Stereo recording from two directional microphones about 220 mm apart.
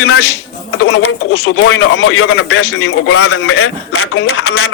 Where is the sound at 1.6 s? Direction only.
60° left (ahead or behind).